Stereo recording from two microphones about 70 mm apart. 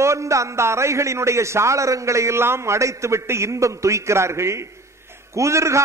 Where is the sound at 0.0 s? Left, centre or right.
Right.